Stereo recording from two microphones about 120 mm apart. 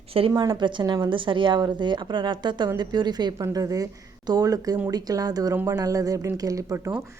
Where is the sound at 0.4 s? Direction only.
35° right (ahead or behind).